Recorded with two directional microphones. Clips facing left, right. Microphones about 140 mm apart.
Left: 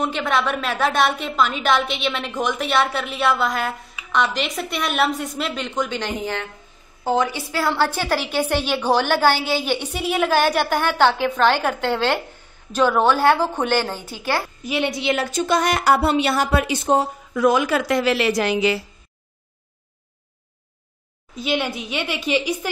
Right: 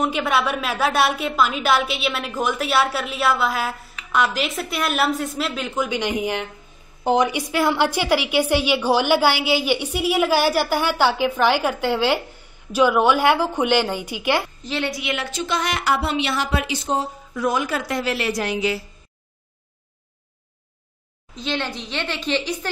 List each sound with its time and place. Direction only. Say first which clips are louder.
0.0 s a woman's voice: right 1 dB; 10° right (ahead or behind)
14.6 s a woman's voice: left 3 dB; 10° left (ahead or behind)
14.9 s a woman's voice: left 4 dB; 30° left (ahead or behind)
15.1 s speech: left 5 dB; 45° left (ahead or behind); by 18.8 s 85° left
21.4 s a woman's voice: left 3 dB; 10° left (ahead or behind)